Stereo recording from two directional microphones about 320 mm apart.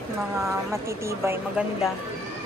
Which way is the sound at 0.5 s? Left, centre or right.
Centre.